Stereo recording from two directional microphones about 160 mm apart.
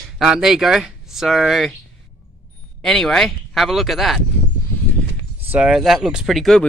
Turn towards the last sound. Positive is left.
turn(degrees=0)  # may be behind; listen again after turning